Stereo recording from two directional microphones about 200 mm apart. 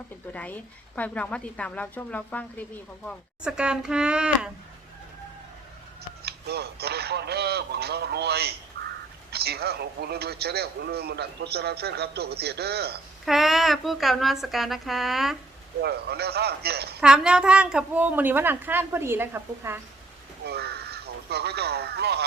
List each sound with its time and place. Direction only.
0.3 s a woman's voice: 10° left (ahead or behind)
3.4 s speech: 5° right (ahead or behind)
6.2 s a man's voice: 55° right (ahead or behind)
13.2 s speech: centre (ahead or behind)
15.8 s a man's voice: 55° right (ahead or behind)
17.0 s a woman's voice: 5° right (ahead or behind)
20.4 s speech: 55° right (ahead or behind)